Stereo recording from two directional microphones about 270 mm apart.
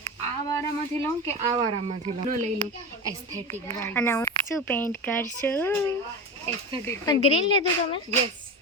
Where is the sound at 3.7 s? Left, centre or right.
Centre.